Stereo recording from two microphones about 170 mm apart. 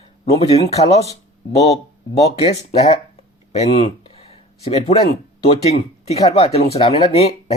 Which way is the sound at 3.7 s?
35° left (ahead or behind).